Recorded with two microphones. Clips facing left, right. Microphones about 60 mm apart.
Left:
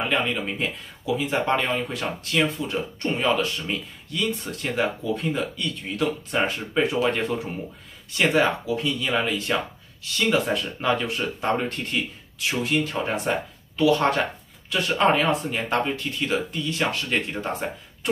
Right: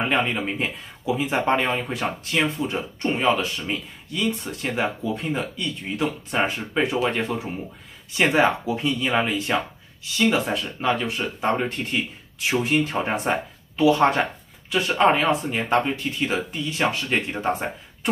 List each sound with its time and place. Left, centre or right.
0.0 s speech: right; by 7.5 s centre
8.1 s speech: centre